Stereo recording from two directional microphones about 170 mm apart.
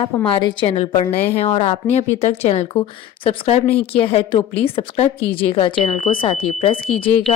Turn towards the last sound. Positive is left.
turn(degrees=30)  # may be behind; listen again after turning